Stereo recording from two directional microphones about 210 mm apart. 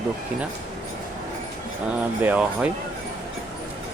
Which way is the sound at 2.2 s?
5° right (ahead or behind).